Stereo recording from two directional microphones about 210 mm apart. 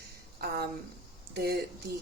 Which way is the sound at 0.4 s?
50° right (ahead or behind).